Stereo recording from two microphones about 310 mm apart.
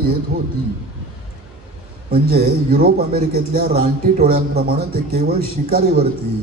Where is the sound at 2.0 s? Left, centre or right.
Right.